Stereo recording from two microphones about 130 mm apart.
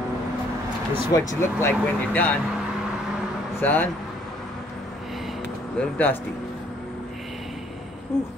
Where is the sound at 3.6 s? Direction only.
15° left (ahead or behind).